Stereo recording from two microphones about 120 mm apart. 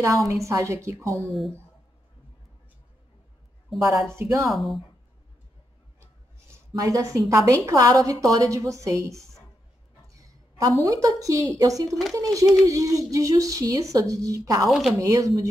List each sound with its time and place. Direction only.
0.0 s a woman's voice: 25° right (ahead or behind)
4.1 s a woman's voice: 25° right (ahead or behind)
4.5 s speech: centre (ahead or behind)
6.7 s a woman's voice: 30° right (ahead or behind)
10.8 s a woman's voice: 30° right (ahead or behind)
14.7 s speech: centre (ahead or behind)
15.0 s a woman's voice: 25° right (ahead or behind)